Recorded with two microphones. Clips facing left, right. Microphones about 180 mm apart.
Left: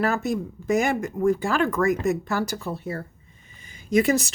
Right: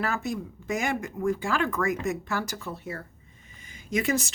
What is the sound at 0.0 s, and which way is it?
Speech, 40° left (ahead or behind).